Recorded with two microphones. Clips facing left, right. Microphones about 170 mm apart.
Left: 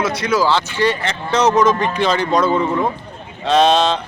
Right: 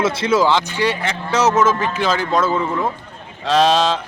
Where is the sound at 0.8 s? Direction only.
10° right (ahead or behind).